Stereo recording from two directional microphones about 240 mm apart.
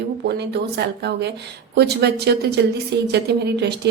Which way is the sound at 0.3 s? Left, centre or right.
Right.